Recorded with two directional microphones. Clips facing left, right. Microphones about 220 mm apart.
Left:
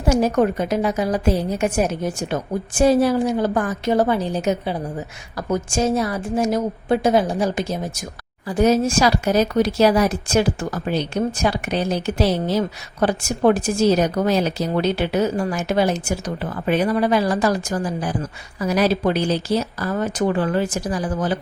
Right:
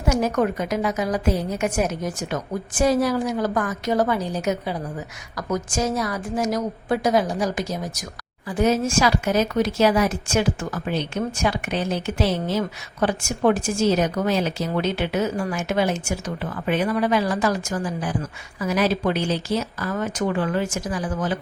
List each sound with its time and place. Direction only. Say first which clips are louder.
0.0 s a woman's voice: left 4 dB; 30° left (ahead or behind)
8.4 s speech: left 4 dB; 40° left (ahead or behind)